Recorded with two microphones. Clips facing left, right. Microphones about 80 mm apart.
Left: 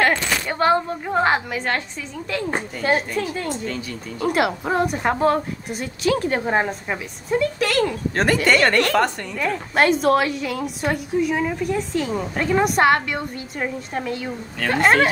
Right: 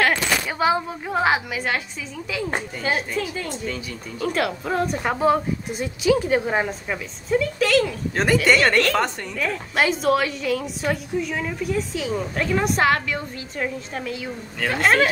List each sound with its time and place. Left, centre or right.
0.0 s a woman's voice: centre
4.2 s a woman's voice: centre
4.5 s a woman's voice: left
4.8 s a woman's voice: centre
5.7 s speech: centre
6.5 s a woman's voice: centre
8.7 s a woman's voice: centre
11.6 s a woman's voice: centre